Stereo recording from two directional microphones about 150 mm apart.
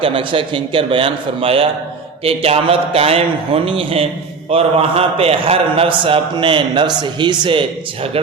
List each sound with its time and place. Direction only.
0.0 s a man's voice: 35° right (ahead or behind)